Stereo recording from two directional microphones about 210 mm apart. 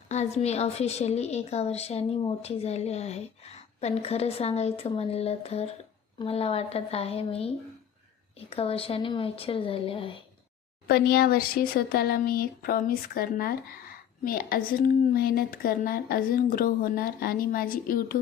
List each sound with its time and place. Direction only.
0.1 s a woman's voice: 30° left (ahead or behind)
10.8 s a woman's voice: 50° left (ahead or behind)